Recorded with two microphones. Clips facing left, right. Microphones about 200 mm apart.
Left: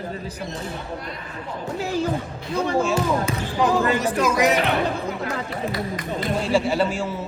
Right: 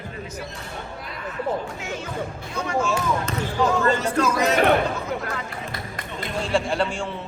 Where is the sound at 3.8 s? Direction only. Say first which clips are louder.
Even; 15° left (ahead or behind).